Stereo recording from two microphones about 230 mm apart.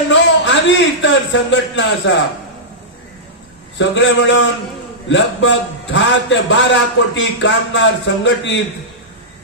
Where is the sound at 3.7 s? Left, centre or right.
Left.